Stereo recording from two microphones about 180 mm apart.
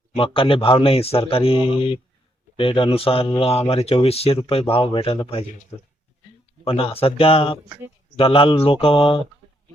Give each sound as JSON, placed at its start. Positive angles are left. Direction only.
{"t": 0.2, "sound": "speech", "side_deg": 30}
{"t": 6.7, "sound": "speech", "side_deg": 30}